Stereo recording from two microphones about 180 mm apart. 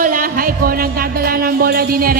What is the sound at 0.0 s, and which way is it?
Speech, 50° right (ahead or behind).